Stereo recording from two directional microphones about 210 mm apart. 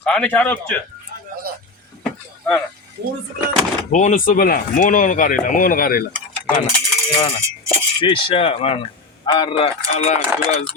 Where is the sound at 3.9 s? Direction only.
35° left (ahead or behind).